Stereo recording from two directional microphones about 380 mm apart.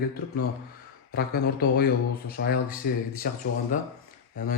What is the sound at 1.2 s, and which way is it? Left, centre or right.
A man's voice, left.